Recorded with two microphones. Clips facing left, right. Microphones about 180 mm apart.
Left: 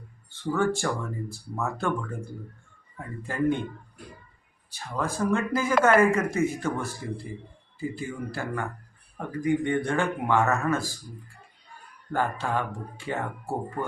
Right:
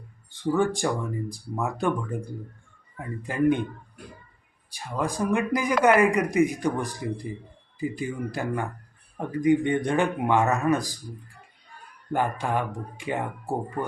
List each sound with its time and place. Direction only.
0.5 s speech: 15° right (ahead or behind)
4.7 s speech: 15° right (ahead or behind)
12.1 s speech: 15° right (ahead or behind)